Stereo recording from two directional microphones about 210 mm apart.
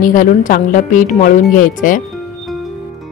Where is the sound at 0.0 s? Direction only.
40° left (ahead or behind).